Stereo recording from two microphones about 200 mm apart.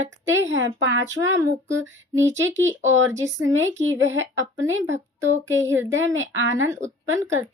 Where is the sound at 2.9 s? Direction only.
70° right (ahead or behind).